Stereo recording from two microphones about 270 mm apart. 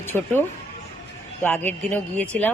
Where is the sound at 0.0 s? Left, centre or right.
Centre.